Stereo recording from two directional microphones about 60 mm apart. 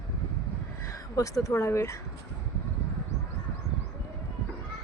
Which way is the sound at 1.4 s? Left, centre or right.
Left.